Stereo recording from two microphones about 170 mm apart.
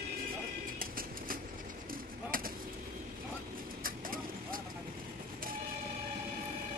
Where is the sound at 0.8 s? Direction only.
55° right (ahead or behind).